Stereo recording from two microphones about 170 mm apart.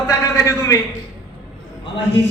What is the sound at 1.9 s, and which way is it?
Speech, 90° left.